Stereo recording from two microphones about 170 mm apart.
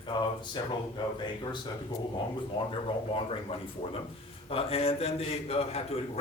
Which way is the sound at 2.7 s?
35° left (ahead or behind).